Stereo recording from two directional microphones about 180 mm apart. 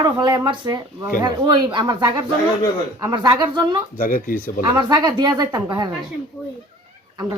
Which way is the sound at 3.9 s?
50° left (ahead or behind).